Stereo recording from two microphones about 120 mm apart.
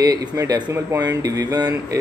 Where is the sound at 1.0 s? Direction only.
30° right (ahead or behind).